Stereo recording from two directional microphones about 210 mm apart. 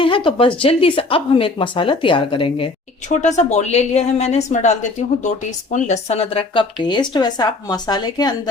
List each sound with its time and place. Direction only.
0.0 s a woman's voice: 25° left (ahead or behind)